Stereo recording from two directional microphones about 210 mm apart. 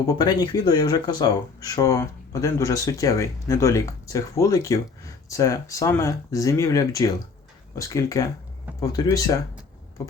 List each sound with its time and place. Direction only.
0.0 s speech: 20° left (ahead or behind)